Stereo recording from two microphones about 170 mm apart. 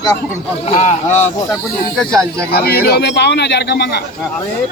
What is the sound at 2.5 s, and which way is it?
A man's voice, 65° left (ahead or behind).